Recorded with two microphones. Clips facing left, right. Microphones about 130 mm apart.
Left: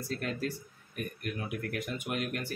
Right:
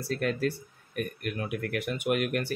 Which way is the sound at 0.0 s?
70° right (ahead or behind).